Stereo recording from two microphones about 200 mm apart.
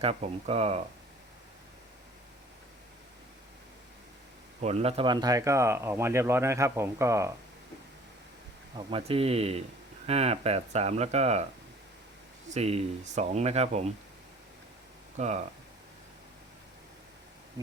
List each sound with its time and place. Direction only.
0.0 s speech: 30° right (ahead or behind)
4.6 s speech: 30° right (ahead or behind); by 7.3 s 15° right (ahead or behind)
8.7 s speech: 25° right (ahead or behind)
12.5 s speech: 30° right (ahead or behind)
15.1 s speech: 35° right (ahead or behind)